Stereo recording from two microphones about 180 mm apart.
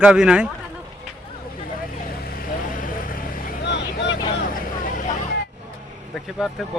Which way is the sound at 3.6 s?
75° left (ahead or behind).